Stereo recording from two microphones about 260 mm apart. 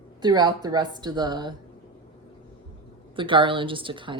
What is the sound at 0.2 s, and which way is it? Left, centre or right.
A woman's voice, centre.